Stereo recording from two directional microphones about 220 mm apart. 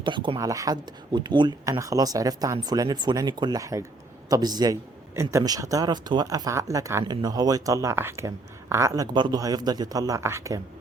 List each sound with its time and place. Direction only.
0.0 s a man's voice: 20° right (ahead or behind)